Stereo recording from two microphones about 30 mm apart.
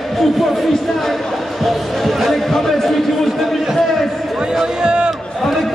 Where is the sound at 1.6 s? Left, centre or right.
Centre.